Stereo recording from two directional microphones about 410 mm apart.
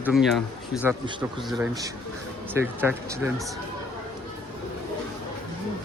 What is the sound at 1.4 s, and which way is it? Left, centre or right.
Speech, centre.